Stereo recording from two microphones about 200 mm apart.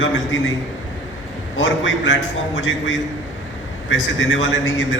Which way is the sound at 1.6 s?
70° left (ahead or behind).